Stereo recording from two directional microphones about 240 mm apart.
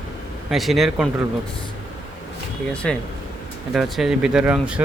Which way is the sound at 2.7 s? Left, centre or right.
Centre.